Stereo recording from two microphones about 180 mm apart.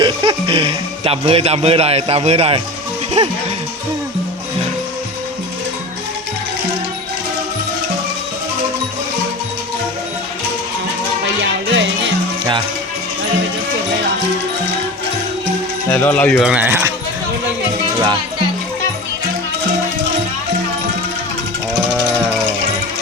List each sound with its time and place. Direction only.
0.0 s speech: 25° right (ahead or behind)
11.7 s music: 90° right
15.9 s speech: 10° left (ahead or behind)
16.4 s speech: 5° right (ahead or behind)